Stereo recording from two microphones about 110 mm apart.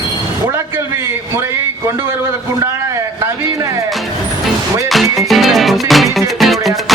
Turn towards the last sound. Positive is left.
turn(degrees=0)  # may be behind; listen again after turning